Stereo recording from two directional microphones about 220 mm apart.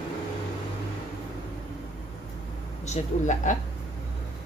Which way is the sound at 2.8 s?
35° left (ahead or behind).